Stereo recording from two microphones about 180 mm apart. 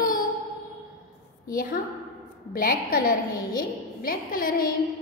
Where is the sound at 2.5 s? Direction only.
55° left (ahead or behind).